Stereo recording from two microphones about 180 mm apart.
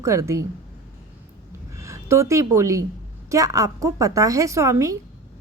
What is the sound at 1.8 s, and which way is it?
A woman's voice, 15° right (ahead or behind).